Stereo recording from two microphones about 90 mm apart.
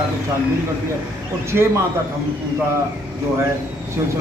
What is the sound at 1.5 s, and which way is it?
Speech, 20° right (ahead or behind).